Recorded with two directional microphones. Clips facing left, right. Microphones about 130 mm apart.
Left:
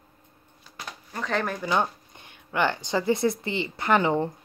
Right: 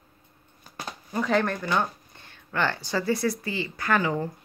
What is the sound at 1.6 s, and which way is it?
A woman's voice, 15° left (ahead or behind).